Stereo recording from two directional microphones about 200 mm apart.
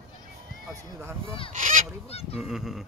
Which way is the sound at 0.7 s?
15° right (ahead or behind).